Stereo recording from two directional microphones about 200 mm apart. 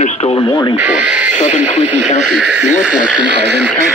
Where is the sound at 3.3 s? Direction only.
60° right (ahead or behind).